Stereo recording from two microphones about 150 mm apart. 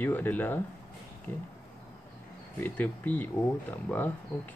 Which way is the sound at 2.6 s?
10° left (ahead or behind).